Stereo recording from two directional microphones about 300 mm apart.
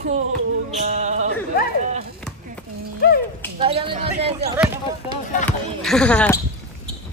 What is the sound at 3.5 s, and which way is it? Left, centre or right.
Speech, centre.